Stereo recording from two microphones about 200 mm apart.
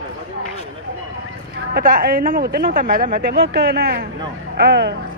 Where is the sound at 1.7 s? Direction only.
45° right (ahead or behind).